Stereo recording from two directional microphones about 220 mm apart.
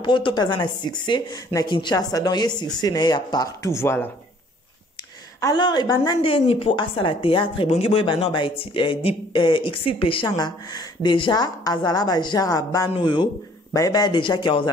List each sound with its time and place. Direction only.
0.0 s speech: 20° left (ahead or behind)
5.4 s speech: 20° left (ahead or behind)